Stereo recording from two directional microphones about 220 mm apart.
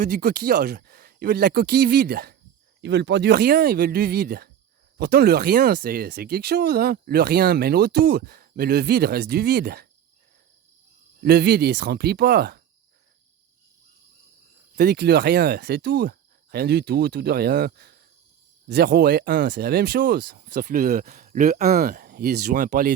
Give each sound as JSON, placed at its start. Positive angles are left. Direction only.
{"t": 0.0, "sound": "speech", "side_deg": -45}
{"t": 11.2, "sound": "speech", "side_deg": -45}
{"t": 14.8, "sound": "speech", "side_deg": -45}